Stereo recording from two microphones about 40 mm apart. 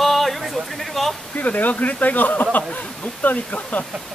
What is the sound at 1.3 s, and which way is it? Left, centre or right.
Speech, left.